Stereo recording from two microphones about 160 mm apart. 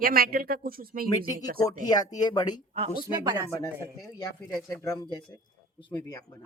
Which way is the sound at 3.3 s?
15° right (ahead or behind).